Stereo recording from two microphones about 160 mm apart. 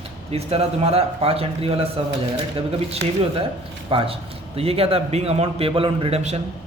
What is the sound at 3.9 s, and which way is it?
A man's voice, 35° right (ahead or behind).